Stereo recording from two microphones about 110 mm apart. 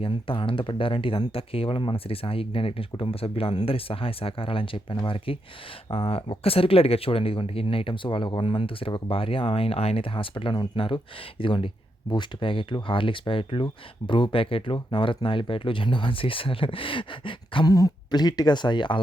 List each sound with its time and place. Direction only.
0.0 s speech: 55° left (ahead or behind)
17.7 s speech: 35° left (ahead or behind)